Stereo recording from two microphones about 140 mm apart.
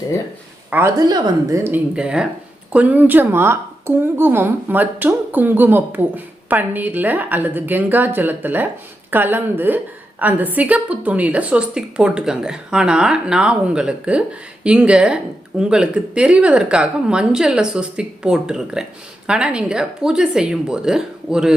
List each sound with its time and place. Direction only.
0.7 s a woman's voice: 15° right (ahead or behind)
0.9 s a woman's voice: 30° right (ahead or behind)
2.0 s a woman's voice: 5° right (ahead or behind)